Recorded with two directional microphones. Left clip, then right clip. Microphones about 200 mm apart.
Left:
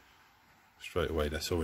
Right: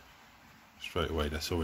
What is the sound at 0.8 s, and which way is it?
Speech, 25° left (ahead or behind).